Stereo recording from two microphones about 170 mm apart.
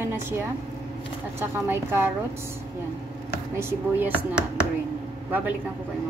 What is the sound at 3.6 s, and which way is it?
A woman's voice, 10° right (ahead or behind).